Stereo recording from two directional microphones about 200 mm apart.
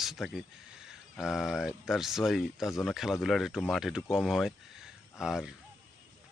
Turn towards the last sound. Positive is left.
turn(degrees=-5)  # may be behind; listen again after turning